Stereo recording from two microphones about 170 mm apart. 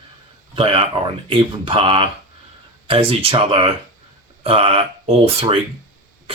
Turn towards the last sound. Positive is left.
turn(degrees=-35)  # may be behind; listen again after turning